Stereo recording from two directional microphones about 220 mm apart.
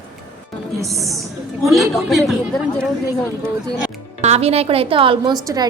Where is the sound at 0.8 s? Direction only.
Centre (ahead or behind).